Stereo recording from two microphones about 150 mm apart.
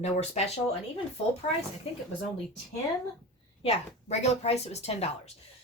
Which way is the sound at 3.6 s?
45° left (ahead or behind).